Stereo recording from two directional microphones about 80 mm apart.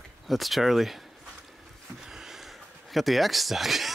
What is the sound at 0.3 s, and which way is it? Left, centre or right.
Speech, centre.